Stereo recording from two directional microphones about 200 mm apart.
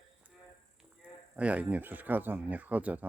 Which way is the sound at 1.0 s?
5° right (ahead or behind).